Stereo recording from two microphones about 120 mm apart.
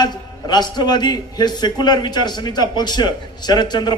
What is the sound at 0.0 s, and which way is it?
A man's voice, 35° left (ahead or behind).